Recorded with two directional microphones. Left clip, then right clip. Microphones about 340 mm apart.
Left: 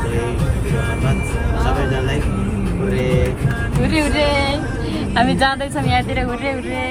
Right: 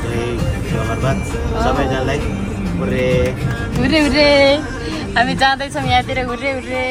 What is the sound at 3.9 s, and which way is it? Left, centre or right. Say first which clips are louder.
Speech: right 6 dB; right.